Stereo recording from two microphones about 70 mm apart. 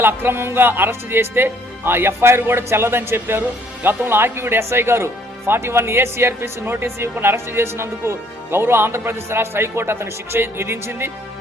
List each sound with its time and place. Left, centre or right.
0.0 s speech: right